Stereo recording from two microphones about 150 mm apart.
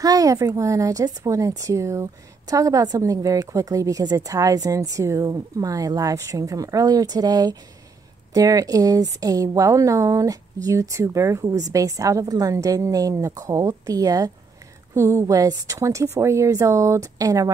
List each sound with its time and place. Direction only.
0.0 s speech: 25° right (ahead or behind)